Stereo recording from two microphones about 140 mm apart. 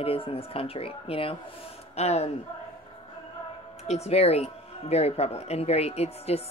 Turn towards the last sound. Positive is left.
turn(degrees=50)  # may be behind; listen again after turning